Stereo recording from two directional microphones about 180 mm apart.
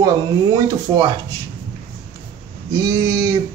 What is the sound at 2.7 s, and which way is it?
Speech, 20° right (ahead or behind).